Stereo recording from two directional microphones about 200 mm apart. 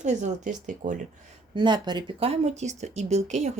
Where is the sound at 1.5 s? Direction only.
20° right (ahead or behind).